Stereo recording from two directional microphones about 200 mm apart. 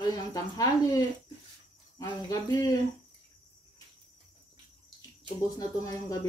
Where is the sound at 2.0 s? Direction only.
20° left (ahead or behind).